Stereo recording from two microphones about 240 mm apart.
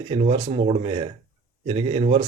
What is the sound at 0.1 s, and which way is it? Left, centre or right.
Speech, right.